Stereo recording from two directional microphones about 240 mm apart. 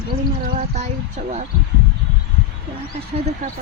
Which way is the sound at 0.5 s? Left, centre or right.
Right.